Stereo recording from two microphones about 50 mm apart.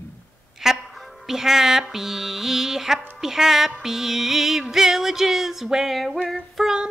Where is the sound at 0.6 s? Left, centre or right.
Centre.